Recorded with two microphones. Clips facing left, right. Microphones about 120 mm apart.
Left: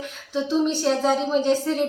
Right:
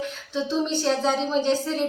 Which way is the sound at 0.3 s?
5° left (ahead or behind).